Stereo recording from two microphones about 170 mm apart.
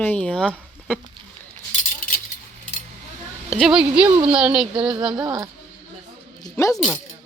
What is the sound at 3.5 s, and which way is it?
Speech, centre (ahead or behind).